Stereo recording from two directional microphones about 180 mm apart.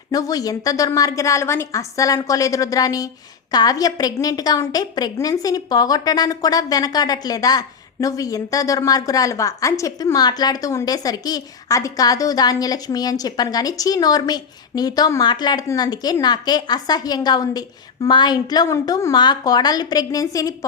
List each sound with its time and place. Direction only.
0.1 s a woman's voice: 20° left (ahead or behind)